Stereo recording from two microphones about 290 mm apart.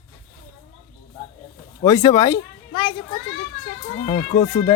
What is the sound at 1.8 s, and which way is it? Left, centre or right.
Speech, centre.